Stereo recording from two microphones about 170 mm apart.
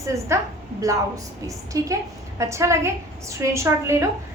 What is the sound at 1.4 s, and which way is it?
A woman's voice, 20° right (ahead or behind).